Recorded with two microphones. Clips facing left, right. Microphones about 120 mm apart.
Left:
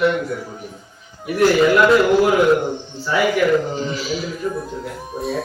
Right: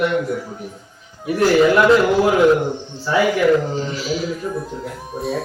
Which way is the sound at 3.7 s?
5° left (ahead or behind).